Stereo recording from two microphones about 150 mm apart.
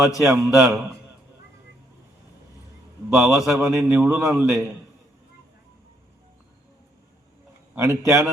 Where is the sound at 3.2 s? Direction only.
20° right (ahead or behind).